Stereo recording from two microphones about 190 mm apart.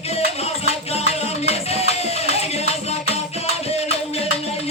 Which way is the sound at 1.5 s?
35° left (ahead or behind).